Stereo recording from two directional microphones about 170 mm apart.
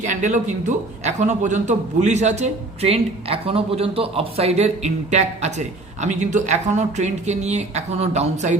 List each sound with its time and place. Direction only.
0.0 s a man's voice: 45° right (ahead or behind)